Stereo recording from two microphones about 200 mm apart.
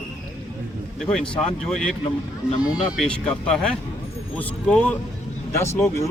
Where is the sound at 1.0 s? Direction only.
Centre (ahead or behind).